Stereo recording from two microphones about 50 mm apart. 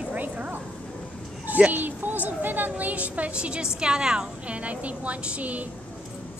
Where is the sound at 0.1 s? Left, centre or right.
Right.